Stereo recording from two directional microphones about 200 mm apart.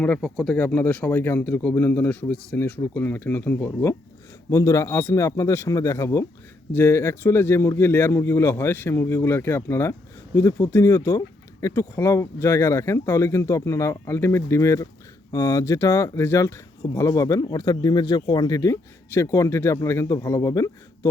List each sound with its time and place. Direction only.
0.0 s speech: 5° left (ahead or behind)